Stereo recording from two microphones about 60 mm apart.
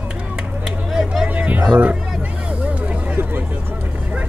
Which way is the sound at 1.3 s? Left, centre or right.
Right.